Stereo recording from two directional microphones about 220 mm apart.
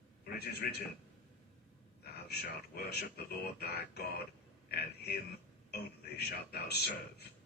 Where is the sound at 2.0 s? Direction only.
45° left (ahead or behind).